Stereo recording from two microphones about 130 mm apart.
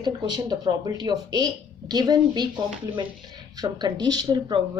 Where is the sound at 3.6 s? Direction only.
30° right (ahead or behind).